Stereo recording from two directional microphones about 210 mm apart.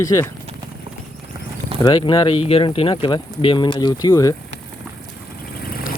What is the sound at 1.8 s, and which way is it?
Speech, 20° left (ahead or behind).